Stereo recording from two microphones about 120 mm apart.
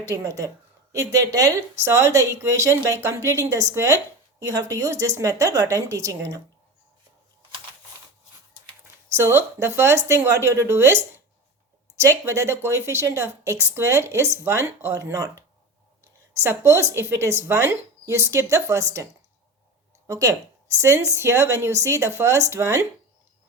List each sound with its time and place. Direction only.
0.0 s a woman's voice: 25° right (ahead or behind)
9.1 s a woman's voice: 20° right (ahead or behind)
20.1 s a woman's voice: 25° right (ahead or behind)